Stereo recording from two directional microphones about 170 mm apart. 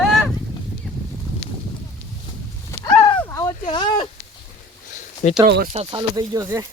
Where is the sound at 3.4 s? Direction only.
25° left (ahead or behind).